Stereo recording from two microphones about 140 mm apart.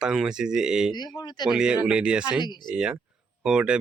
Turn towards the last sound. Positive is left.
turn(degrees=-5)  # may be behind; listen again after turning